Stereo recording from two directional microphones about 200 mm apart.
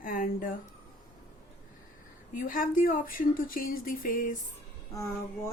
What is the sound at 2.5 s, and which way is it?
Speech, 45° left (ahead or behind).